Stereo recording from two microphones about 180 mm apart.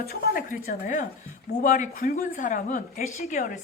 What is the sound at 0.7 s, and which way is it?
A woman's voice, 45° left (ahead or behind).